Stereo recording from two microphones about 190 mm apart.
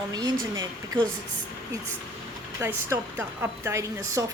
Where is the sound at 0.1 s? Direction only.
20° right (ahead or behind).